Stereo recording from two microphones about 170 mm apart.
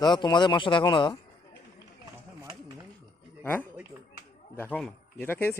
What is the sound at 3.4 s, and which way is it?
Speech, 10° left (ahead or behind).